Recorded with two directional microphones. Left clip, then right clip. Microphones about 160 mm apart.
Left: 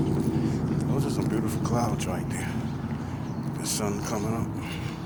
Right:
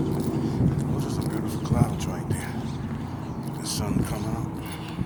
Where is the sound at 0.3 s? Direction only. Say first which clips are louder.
Right 1 dB; 45° left (ahead or behind).